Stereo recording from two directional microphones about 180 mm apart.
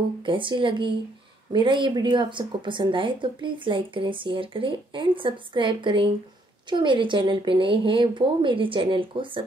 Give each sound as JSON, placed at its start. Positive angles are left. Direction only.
{"t": 0.2, "sound": "speech", "side_deg": -25}